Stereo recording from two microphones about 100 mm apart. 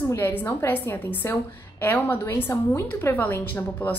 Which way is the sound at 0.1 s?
20° left (ahead or behind).